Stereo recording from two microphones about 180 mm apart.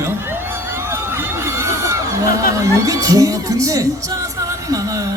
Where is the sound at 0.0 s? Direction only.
15° right (ahead or behind).